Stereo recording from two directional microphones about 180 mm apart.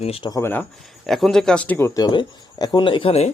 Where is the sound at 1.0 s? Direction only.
Centre (ahead or behind); by 3.3 s 35° left (ahead or behind).